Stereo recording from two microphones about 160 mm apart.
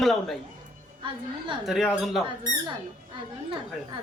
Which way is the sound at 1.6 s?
5° right (ahead or behind).